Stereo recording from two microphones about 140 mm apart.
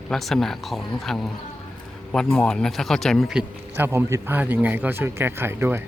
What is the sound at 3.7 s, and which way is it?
Speech, 15° right (ahead or behind).